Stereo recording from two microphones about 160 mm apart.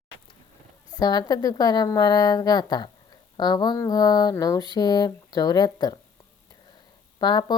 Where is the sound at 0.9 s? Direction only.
25° left (ahead or behind).